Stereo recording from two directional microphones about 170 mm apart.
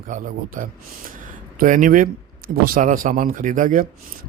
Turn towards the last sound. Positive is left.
turn(degrees=-50)  # may be behind; listen again after turning